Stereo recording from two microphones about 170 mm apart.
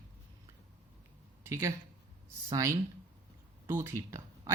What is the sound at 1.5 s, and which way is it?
Speech, 15° right (ahead or behind).